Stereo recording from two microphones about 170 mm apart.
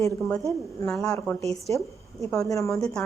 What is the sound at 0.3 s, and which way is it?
Speech, 20° left (ahead or behind).